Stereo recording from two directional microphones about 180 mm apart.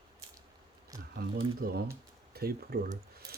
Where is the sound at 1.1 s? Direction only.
60° right (ahead or behind).